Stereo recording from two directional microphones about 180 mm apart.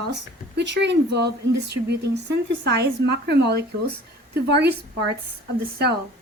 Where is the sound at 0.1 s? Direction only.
75° right (ahead or behind).